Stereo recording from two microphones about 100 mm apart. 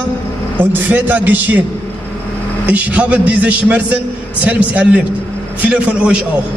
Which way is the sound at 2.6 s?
15° right (ahead or behind).